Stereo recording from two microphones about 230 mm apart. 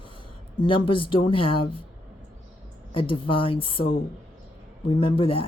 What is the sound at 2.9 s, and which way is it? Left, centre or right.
Speech, left.